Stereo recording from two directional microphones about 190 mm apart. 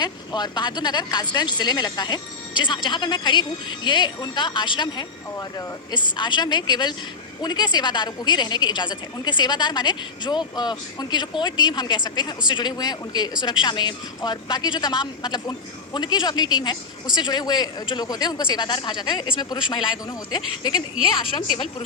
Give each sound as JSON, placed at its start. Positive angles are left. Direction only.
{"t": 0.0, "sound": "a woman's voice", "side_deg": 20}
{"t": 21.3, "sound": "a woman's voice", "side_deg": 25}